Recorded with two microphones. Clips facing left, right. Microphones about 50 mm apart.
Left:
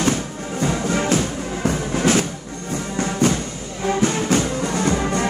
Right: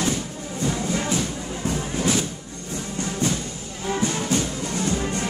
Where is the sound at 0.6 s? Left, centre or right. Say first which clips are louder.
Left 4 dB; left.